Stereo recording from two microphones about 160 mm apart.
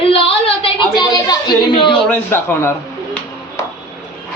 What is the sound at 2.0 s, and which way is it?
Speech, 15° left (ahead or behind).